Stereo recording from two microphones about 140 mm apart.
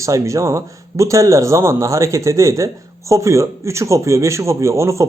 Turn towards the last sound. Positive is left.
turn(degrees=-20)  # may be behind; listen again after turning